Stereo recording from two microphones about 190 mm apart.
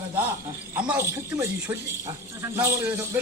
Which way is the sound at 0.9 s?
10° right (ahead or behind).